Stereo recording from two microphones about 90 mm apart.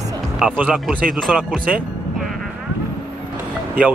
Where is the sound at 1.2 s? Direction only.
Centre (ahead or behind).